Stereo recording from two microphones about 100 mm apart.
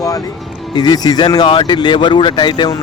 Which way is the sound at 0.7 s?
45° left (ahead or behind).